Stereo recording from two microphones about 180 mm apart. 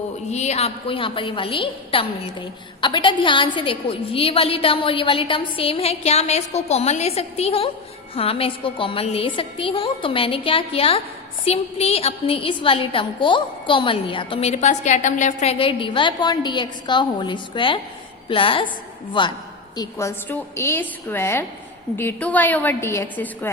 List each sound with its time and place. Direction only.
0.3 s a woman's voice: 40° left (ahead or behind); by 23.5 s 10° left (ahead or behind)